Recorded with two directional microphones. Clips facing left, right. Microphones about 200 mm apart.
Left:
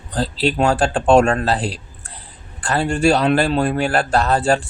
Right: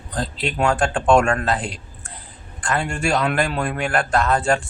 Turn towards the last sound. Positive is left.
turn(degrees=35)  # may be behind; listen again after turning